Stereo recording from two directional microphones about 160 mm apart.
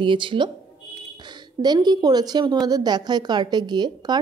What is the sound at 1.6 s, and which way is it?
A woman's voice, 25° right (ahead or behind).